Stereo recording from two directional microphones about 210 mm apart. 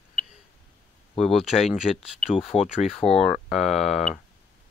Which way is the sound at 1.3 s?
Centre (ahead or behind).